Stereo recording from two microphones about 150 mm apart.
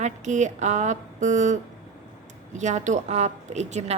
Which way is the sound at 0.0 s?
50° right (ahead or behind).